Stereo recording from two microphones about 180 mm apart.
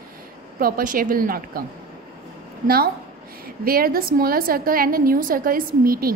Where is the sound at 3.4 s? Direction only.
55° right (ahead or behind).